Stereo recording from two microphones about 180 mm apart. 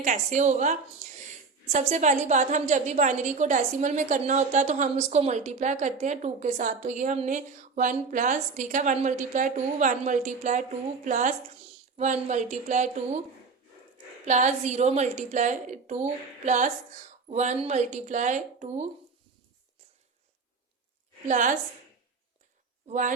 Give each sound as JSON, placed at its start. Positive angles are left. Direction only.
{"t": 0.0, "sound": "a woman's voice", "side_deg": -45}
{"t": 14.3, "sound": "a woman's voice", "side_deg": -40}
{"t": 21.2, "sound": "a woman's voice", "side_deg": -45}
{"t": 22.9, "sound": "a woman's voice", "side_deg": -45}